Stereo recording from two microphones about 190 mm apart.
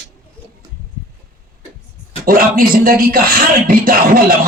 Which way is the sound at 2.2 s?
50° right (ahead or behind).